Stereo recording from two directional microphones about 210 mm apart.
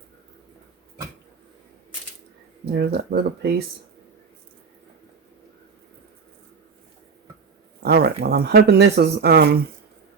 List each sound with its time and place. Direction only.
2.7 s speech: 50° right (ahead or behind)
7.8 s speech: 50° right (ahead or behind)